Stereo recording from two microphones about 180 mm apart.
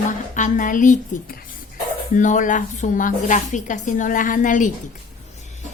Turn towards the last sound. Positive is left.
turn(degrees=45)  # may be behind; listen again after turning